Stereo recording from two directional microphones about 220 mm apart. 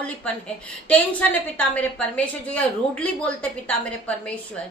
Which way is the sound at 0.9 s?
5° left (ahead or behind).